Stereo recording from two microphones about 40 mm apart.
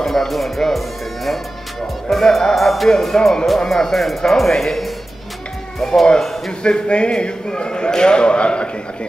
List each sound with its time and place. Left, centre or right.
0.0 s a man's voice: centre
6.6 s speech: left